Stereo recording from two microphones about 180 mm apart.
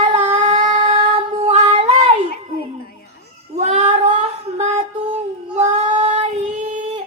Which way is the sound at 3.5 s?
35° right (ahead or behind).